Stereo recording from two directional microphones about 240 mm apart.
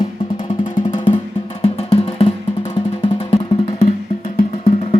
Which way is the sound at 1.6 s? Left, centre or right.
Left.